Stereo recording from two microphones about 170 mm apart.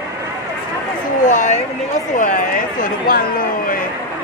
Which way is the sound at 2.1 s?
50° left (ahead or behind).